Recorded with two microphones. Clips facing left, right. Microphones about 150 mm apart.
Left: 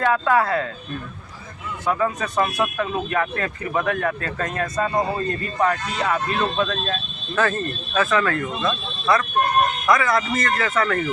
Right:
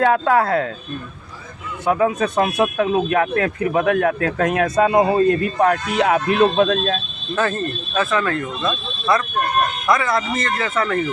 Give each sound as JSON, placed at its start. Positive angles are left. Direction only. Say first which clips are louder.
{"t": 0.0, "sound": "speech", "louder": "right 3 dB", "side_deg": -55}
{"t": 1.8, "sound": "speech", "louder": "right 5 dB", "side_deg": -60}
{"t": 5.5, "sound": "speech", "louder": "right 5 dB", "side_deg": -60}
{"t": 7.3, "sound": "speech", "louder": "right 1 dB", "side_deg": -25}